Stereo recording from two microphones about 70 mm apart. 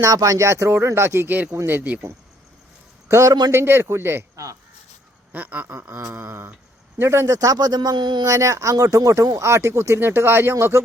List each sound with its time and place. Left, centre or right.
0.0 s speech: right
3.1 s speech: right
3.5 s speech: right
5.3 s speech: right
7.3 s speech: right
8.3 s speech: right
9.5 s speech: right